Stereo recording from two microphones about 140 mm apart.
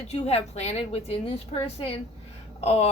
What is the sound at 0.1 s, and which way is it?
Speech, 50° left (ahead or behind).